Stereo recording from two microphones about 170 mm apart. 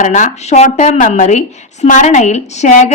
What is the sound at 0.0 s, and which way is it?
A woman's voice, 45° left (ahead or behind).